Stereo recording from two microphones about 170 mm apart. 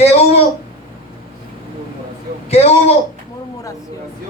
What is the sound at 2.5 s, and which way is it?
Speech, 40° left (ahead or behind).